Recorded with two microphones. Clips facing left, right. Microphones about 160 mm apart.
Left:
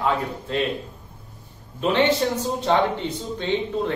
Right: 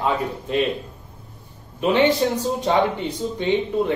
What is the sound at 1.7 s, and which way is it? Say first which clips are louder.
Speech: right 2 dB; 15° right (ahead or behind).